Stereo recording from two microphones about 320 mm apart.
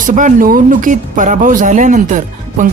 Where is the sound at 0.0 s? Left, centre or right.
Right.